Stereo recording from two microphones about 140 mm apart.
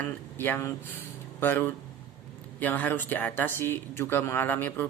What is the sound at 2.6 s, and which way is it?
Speech, 15° left (ahead or behind).